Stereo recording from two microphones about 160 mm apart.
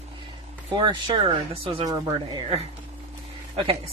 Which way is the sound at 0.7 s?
30° right (ahead or behind).